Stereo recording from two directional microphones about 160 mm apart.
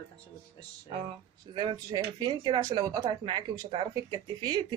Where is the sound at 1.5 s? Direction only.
30° right (ahead or behind).